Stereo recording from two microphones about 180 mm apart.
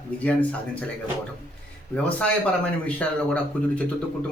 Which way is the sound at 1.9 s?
5° left (ahead or behind).